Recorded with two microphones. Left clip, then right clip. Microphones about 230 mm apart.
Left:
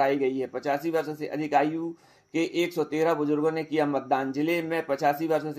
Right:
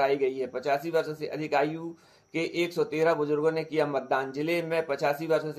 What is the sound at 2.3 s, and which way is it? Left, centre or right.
Speech, left.